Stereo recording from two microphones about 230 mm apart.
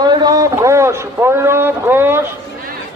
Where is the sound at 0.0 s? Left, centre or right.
Centre.